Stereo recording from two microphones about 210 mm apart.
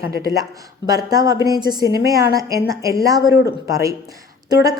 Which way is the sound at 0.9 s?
15° right (ahead or behind).